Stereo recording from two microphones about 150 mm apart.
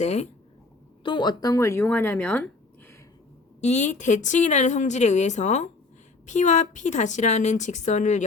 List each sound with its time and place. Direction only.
0.0 s a woman's voice: 50° left (ahead or behind)
1.0 s speech: 30° left (ahead or behind); by 2.9 s 10° left (ahead or behind)
3.6 s a woman's voice: 50° left (ahead or behind)